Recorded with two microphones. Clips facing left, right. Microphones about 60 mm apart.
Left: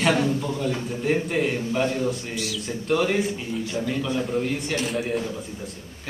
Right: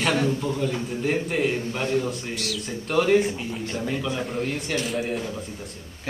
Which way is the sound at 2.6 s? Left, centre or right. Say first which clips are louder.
Right 1 dB; centre.